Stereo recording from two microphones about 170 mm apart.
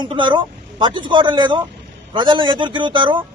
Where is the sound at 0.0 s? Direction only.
30° right (ahead or behind).